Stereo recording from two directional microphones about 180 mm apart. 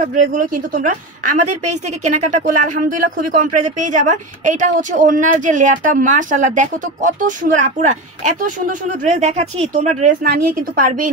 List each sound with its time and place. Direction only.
0.0 s a woman's voice: 45° right (ahead or behind)
10.2 s a woman's voice: 55° right (ahead or behind)